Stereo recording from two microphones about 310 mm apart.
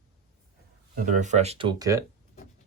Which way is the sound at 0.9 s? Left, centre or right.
Right.